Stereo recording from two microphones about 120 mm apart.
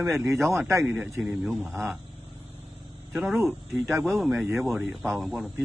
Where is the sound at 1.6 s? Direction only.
Centre (ahead or behind).